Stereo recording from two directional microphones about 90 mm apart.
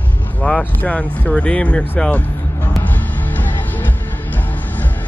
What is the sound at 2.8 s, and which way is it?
Music, 20° left (ahead or behind).